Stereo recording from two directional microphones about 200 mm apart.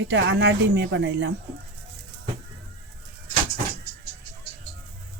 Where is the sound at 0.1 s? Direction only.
60° right (ahead or behind).